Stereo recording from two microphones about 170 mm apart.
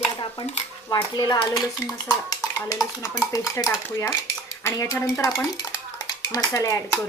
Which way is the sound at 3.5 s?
15° left (ahead or behind).